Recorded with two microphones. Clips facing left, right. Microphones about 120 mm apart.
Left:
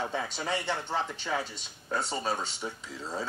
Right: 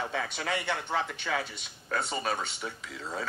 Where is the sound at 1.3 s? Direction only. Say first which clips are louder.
Even; 20° left (ahead or behind).